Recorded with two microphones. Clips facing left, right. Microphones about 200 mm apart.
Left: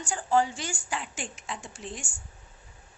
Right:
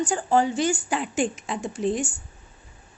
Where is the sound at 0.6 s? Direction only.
60° right (ahead or behind).